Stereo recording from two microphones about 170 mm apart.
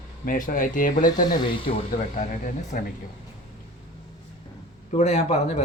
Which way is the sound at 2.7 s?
50° left (ahead or behind).